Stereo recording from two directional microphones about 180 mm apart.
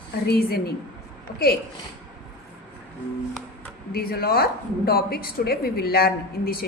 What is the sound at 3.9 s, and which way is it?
Speech, 55° left (ahead or behind).